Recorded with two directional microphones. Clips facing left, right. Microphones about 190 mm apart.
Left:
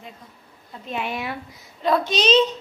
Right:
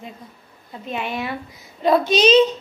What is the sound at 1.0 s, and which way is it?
Speech, 5° left (ahead or behind).